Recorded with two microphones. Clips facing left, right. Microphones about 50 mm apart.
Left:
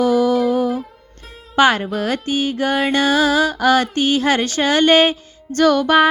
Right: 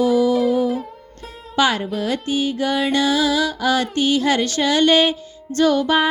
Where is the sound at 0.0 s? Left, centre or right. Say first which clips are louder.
Left 1 dB; left.